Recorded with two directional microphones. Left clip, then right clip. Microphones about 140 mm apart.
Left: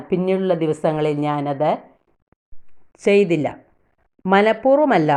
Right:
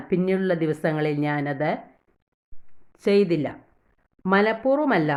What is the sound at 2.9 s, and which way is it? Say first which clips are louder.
Speech: left 5 dB; 10° left (ahead or behind).